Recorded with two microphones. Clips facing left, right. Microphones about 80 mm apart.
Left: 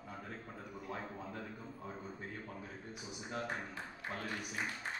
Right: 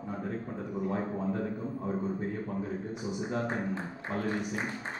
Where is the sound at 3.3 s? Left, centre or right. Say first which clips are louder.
Right 6 dB; right.